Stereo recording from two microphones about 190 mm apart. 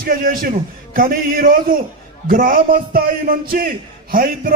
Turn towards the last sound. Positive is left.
turn(degrees=-50)  # may be behind; listen again after turning